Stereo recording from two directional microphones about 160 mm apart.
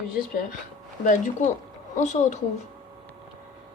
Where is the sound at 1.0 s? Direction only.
55° left (ahead or behind).